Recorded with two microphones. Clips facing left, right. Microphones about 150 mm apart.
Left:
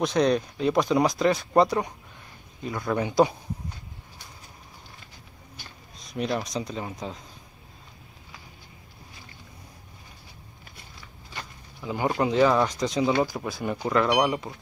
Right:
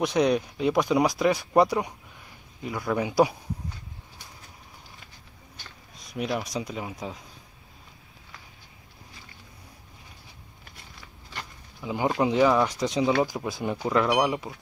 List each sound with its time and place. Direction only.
0.0 s speech: 10° right (ahead or behind)
6.1 s speech: 5° right (ahead or behind)
11.8 s speech: 15° right (ahead or behind)
13.8 s speech: 5° right (ahead or behind)